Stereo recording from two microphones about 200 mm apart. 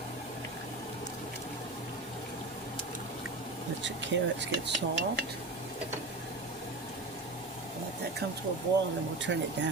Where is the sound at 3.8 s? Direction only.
60° right (ahead or behind).